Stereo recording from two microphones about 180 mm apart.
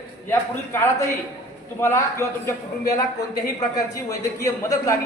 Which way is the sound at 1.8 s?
15° left (ahead or behind).